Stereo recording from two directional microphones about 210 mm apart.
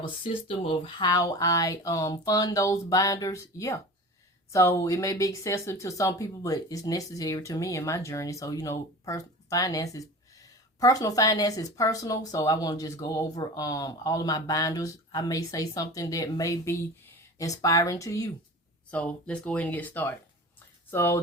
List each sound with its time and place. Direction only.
0.2 s speech: 25° left (ahead or behind)